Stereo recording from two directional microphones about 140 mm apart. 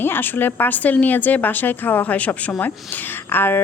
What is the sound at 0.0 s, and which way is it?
A woman's voice, 15° left (ahead or behind).